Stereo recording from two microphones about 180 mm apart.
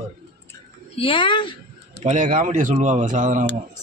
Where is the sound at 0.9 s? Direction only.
30° left (ahead or behind).